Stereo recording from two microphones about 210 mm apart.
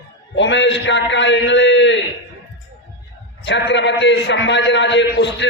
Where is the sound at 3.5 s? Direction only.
55° left (ahead or behind).